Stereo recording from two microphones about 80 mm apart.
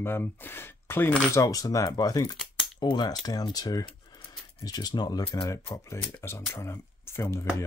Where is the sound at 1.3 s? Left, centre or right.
Left.